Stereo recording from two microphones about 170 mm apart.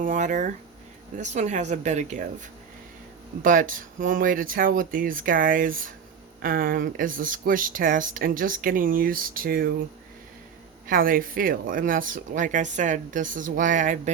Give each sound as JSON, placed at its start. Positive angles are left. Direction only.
{"t": 0.0, "sound": "speech", "side_deg": -45}
{"t": 10.8, "sound": "speech", "side_deg": -55}